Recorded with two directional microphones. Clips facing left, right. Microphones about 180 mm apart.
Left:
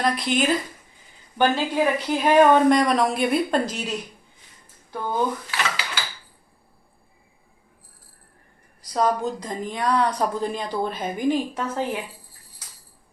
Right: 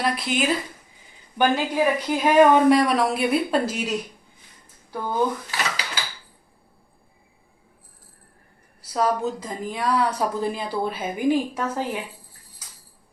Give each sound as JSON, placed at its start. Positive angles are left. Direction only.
{"t": 0.0, "sound": "speech", "side_deg": 0}
{"t": 5.5, "sound": "dishes", "side_deg": -40}
{"t": 8.8, "sound": "speech", "side_deg": -5}